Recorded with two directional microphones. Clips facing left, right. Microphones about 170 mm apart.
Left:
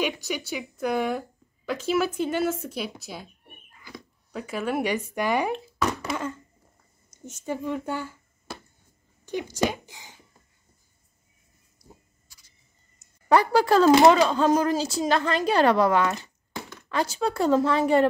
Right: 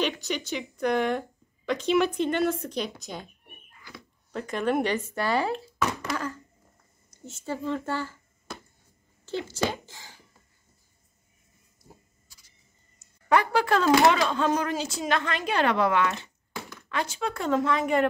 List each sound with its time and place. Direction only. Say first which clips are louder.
0.0 s speech: even; 10° left (ahead or behind)
4.3 s speech: right 2 dB; 5° left (ahead or behind)
6.1 s a sound: left 1 dB; 20° left (ahead or behind)
7.1 s speech: left 2 dB; 15° left (ahead or behind)
9.2 s speech: left 3 dB; 15° left (ahead or behind)
13.3 s a woman's voice: left 3 dB; 35° left (ahead or behind)
16.5 s a sound: left 2 dB; 25° left (ahead or behind)
16.9 s a woman's voice: left 4 dB; 35° left (ahead or behind)